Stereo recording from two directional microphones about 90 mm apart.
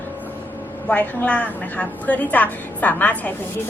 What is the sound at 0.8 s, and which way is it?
A woman's voice, 15° left (ahead or behind).